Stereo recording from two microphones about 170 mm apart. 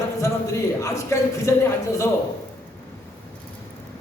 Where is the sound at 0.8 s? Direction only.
20° left (ahead or behind).